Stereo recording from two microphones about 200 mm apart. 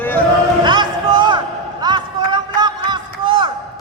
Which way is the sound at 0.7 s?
20° right (ahead or behind).